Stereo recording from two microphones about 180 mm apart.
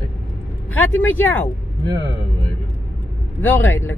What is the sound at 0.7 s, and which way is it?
Speech, 10° left (ahead or behind).